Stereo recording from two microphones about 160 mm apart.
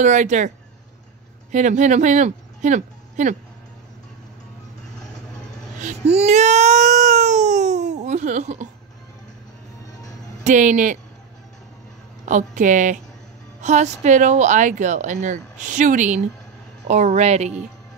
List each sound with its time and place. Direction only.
0.0 s speech: 50° right (ahead or behind)
1.5 s speech: 50° right (ahead or behind)
5.8 s a sound: 50° right (ahead or behind)
10.4 s speech: 50° right (ahead or behind)
12.3 s speech: 50° right (ahead or behind)